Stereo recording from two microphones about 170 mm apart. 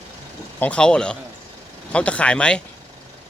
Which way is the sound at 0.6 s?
5° left (ahead or behind).